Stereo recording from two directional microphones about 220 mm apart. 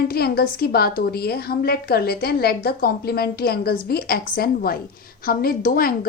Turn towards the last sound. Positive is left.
turn(degrees=40)  # may be behind; listen again after turning